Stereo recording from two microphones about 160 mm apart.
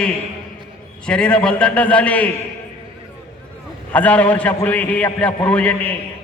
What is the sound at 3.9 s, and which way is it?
A man's voice, 10° left (ahead or behind).